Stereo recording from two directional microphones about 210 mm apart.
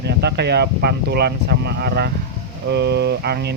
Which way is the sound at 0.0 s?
55° right (ahead or behind).